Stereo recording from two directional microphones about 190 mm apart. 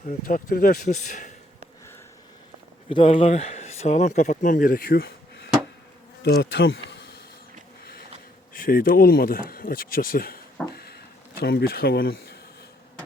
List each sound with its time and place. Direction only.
0.3 s speech: 45° left (ahead or behind)
2.9 s speech: 30° left (ahead or behind); by 5.1 s 55° left (ahead or behind)
6.2 s bee: 85° left
8.5 s speech: 50° left (ahead or behind)
10.8 s a sound: 55° left (ahead or behind)